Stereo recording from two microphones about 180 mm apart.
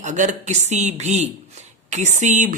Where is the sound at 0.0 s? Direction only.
45° right (ahead or behind).